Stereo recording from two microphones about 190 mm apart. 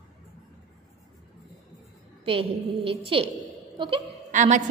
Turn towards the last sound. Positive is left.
turn(degrees=-40)  # may be behind; listen again after turning